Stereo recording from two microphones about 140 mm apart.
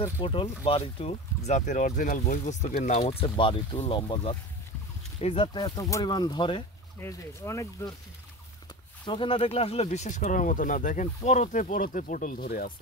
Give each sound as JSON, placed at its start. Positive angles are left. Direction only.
{"t": 0.2, "sound": "speech", "side_deg": 40}
{"t": 7.0, "sound": "speech", "side_deg": 20}
{"t": 9.0, "sound": "speech", "side_deg": 35}